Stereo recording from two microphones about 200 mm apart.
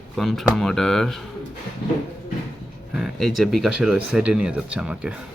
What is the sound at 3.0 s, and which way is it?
Speech, centre (ahead or behind).